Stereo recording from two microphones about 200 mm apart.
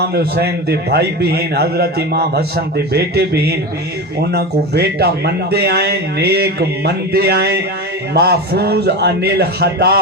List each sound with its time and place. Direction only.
0.0 s a man's voice: 50° right (ahead or behind)